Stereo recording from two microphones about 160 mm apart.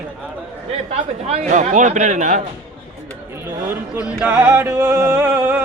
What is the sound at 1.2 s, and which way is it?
Speech, 45° right (ahead or behind).